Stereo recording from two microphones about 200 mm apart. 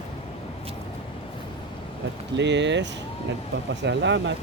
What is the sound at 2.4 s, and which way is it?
Speech, 60° right (ahead or behind).